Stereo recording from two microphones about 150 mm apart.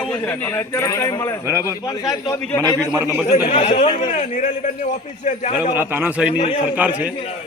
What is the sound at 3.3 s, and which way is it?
A man's voice, 50° left (ahead or behind).